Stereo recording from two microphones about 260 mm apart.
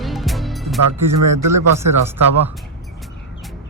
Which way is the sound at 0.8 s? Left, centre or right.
Right.